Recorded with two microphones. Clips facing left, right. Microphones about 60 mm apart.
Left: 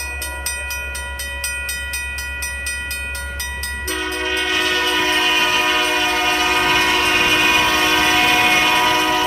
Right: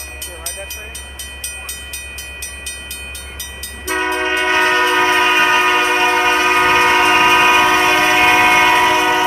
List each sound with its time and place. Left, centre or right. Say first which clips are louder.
3.9 s train: right 6 dB; right